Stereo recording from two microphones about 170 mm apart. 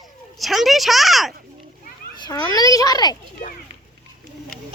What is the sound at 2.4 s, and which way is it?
Speech, 20° left (ahead or behind).